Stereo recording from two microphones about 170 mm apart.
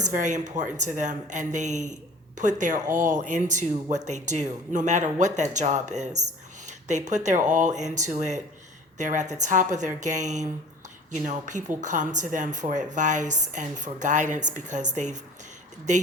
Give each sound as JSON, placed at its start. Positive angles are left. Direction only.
{"t": 0.0, "sound": "a woman's voice", "side_deg": -45}